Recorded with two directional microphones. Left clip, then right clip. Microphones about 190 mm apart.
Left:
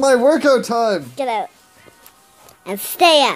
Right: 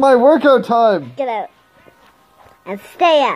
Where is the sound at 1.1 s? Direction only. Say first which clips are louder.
Even; 35° left (ahead or behind).